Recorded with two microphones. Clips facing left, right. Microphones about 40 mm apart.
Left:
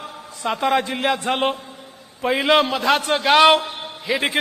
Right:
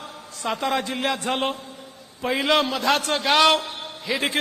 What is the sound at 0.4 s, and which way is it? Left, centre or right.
A man's voice, centre.